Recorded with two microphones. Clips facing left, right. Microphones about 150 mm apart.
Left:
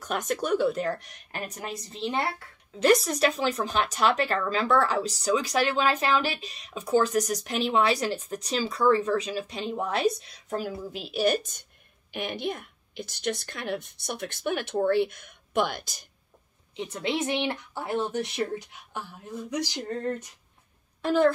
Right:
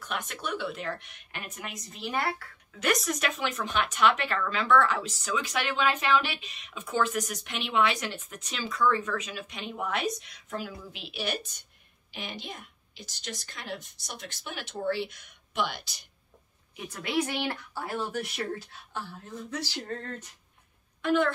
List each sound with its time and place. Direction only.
0.0 s a woman's voice: 40° left (ahead or behind)
16.7 s speech: 25° left (ahead or behind)
21.0 s a woman's voice: 35° left (ahead or behind)